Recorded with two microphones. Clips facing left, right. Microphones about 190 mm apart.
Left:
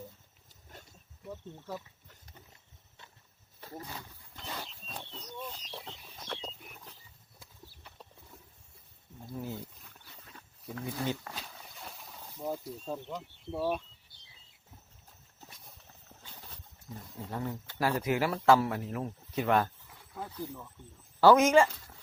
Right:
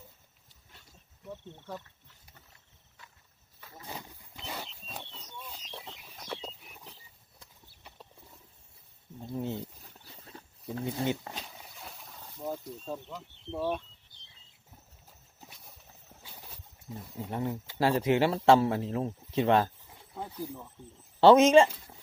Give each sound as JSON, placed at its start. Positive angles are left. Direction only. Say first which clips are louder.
{"t": 1.2, "sound": "speech", "louder": "even", "side_deg": 5}
{"t": 3.6, "sound": "roaring cats", "louder": "left 8 dB", "side_deg": 40}
{"t": 4.4, "sound": "wild animals", "louder": "right 1 dB", "side_deg": -10}
{"t": 4.6, "sound": "a sound", "louder": "right 1 dB", "side_deg": 0}
{"t": 9.2, "sound": "wild animals", "louder": "right 5 dB", "side_deg": -25}
{"t": 11.7, "sound": "a sound", "louder": "even", "side_deg": 0}
{"t": 16.2, "sound": "boat", "louder": "right 1 dB", "side_deg": -10}
{"t": 16.9, "sound": "speech", "louder": "right 3 dB", "side_deg": -20}
{"t": 17.7, "sound": "speech", "louder": "right 4 dB", "side_deg": -25}
{"t": 21.2, "sound": "speech", "louder": "right 3 dB", "side_deg": -25}